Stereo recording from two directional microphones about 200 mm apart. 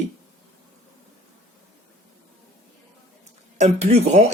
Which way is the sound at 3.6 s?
35° right (ahead or behind).